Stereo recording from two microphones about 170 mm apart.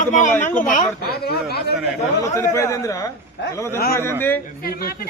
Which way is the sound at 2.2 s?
20° left (ahead or behind).